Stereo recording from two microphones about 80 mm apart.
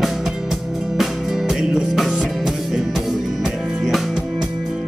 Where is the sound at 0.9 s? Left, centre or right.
Centre.